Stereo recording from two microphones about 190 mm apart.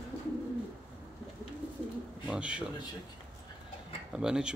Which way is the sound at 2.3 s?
5° right (ahead or behind).